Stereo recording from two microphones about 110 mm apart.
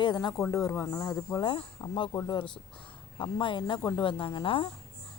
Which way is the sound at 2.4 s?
45° left (ahead or behind).